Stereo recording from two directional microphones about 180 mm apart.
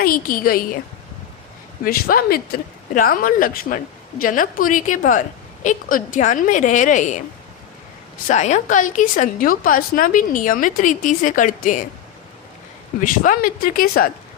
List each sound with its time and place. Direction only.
0.0 s a woman's voice: 55° left (ahead or behind)
1.8 s a woman's voice: 55° left (ahead or behind)
8.3 s a woman's voice: 40° left (ahead or behind)
13.0 s a woman's voice: 50° left (ahead or behind)